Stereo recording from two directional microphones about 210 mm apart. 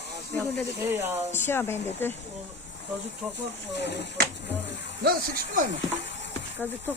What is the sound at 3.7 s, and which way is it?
Speech, 55° left (ahead or behind).